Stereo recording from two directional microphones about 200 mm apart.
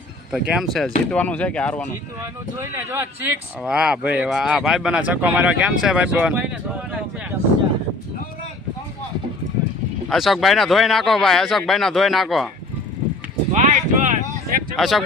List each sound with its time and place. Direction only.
0.3 s speech: 5° right (ahead or behind)
2.6 s a man's voice: 10° right (ahead or behind)
10.1 s speech: centre (ahead or behind)
13.5 s a sound: 40° right (ahead or behind)
14.8 s speech: centre (ahead or behind)